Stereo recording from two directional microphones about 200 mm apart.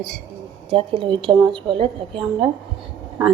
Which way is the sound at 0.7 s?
25° right (ahead or behind).